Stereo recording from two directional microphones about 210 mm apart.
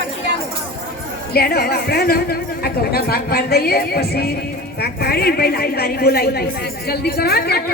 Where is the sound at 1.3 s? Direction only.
45° left (ahead or behind).